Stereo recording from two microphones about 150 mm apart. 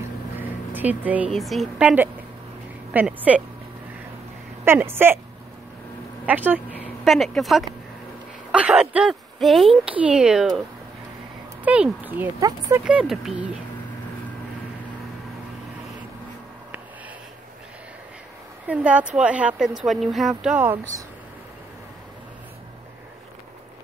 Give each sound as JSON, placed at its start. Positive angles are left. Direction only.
{"t": 0.4, "sound": "a woman's voice", "side_deg": -10}
{"t": 4.6, "sound": "a woman's voice", "side_deg": -15}
{"t": 6.2, "sound": "a sound", "side_deg": -10}
{"t": 7.2, "sound": "speech", "side_deg": 0}
{"t": 11.6, "sound": "a woman's voice", "side_deg": -10}
{"t": 12.4, "sound": "speech", "side_deg": -25}
{"t": 12.8, "sound": "speech", "side_deg": -5}
{"t": 18.7, "sound": "a woman's voice", "side_deg": -10}